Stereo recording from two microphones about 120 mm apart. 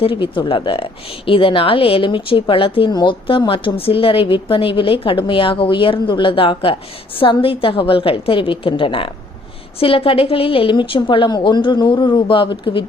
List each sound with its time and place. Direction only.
0.0 s a woman's voice: 45° left (ahead or behind)